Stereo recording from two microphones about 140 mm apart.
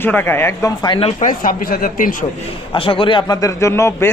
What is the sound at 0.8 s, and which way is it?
Speech, 40° left (ahead or behind).